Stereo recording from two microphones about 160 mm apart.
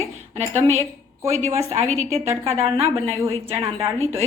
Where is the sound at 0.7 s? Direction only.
20° right (ahead or behind).